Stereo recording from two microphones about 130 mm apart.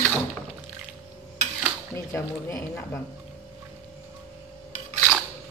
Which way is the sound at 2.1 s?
20° left (ahead or behind).